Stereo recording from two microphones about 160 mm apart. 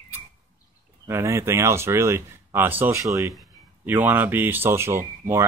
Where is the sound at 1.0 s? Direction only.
15° right (ahead or behind).